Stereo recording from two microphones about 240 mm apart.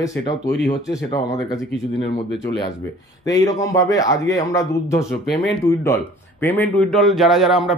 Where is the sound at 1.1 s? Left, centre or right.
Centre.